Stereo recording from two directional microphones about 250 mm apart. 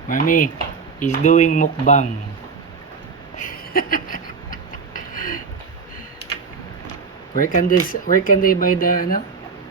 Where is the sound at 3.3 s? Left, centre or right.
Left.